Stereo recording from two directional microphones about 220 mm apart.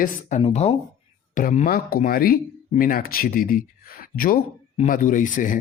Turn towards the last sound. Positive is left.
turn(degrees=35)  # may be behind; listen again after turning